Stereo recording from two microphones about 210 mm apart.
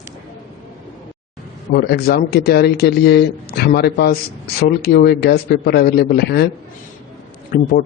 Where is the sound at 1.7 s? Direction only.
50° left (ahead or behind).